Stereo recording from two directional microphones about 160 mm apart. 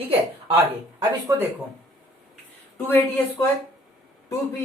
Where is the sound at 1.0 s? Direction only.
15° right (ahead or behind).